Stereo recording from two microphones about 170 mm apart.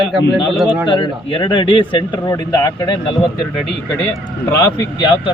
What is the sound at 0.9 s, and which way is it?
Speech, 30° left (ahead or behind).